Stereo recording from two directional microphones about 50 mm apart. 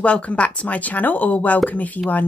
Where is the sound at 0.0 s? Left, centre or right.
Left.